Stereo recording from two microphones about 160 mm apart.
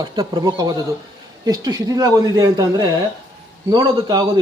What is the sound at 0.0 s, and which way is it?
A man's voice, 30° right (ahead or behind).